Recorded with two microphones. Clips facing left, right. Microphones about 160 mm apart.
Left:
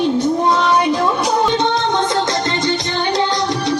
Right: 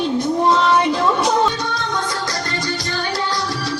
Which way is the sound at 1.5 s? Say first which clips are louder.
Left 7 dB; 25° left (ahead or behind).